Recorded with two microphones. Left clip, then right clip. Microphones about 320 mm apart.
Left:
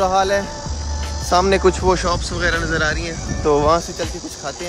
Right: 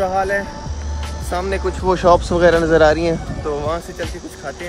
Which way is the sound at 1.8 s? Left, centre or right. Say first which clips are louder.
Right 5 dB; centre.